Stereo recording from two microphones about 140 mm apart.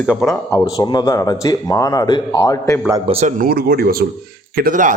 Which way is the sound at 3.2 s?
85° right.